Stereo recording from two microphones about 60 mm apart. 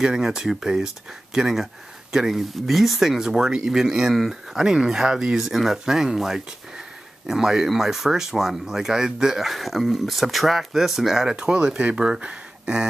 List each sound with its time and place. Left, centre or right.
0.0 s speech: centre